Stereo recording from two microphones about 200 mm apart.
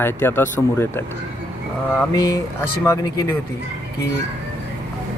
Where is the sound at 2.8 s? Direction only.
15° left (ahead or behind).